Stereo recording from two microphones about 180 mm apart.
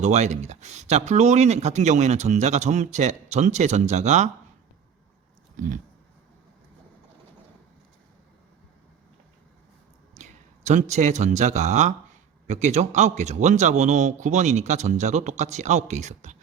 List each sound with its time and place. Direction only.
0.0 s speech: 40° right (ahead or behind)
5.6 s a sound: 45° right (ahead or behind)
10.2 s a man's voice: 40° right (ahead or behind)